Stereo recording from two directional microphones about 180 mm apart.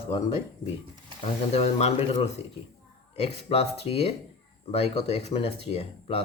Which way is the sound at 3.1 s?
35° left (ahead or behind).